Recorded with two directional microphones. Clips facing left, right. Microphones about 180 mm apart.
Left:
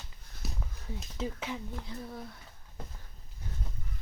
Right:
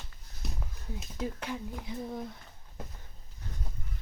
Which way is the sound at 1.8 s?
15° right (ahead or behind).